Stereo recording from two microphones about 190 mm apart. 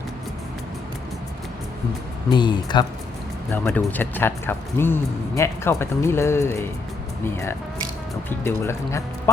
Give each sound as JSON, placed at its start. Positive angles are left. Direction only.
{"t": 2.3, "sound": "speech", "side_deg": 25}
{"t": 3.5, "sound": "speech", "side_deg": 10}